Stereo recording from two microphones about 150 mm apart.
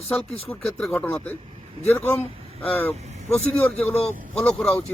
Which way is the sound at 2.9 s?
50° right (ahead or behind).